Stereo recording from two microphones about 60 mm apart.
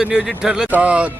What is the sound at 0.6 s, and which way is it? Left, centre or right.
Speech, right.